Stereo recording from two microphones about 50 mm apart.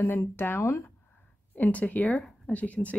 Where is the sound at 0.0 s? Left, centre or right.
Left.